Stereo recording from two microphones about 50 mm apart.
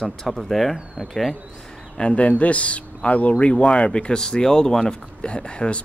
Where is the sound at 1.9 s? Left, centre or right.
Left.